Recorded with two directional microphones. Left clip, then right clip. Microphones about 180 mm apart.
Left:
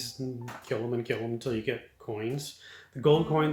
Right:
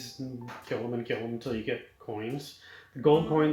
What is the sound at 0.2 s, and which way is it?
Speech, 55° left (ahead or behind).